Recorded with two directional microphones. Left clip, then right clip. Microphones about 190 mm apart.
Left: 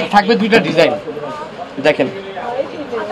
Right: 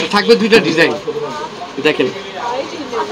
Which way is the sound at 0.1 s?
30° left (ahead or behind).